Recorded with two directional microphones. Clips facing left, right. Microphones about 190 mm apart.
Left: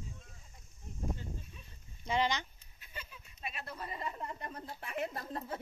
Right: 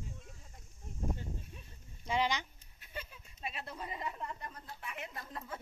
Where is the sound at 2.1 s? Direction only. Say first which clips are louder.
Left 1 dB; 5° right (ahead or behind).